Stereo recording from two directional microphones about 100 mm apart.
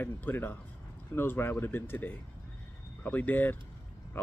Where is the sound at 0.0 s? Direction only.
20° left (ahead or behind).